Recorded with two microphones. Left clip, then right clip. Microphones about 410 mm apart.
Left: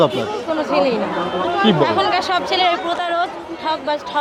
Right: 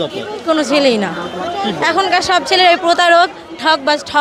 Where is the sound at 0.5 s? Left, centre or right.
Right.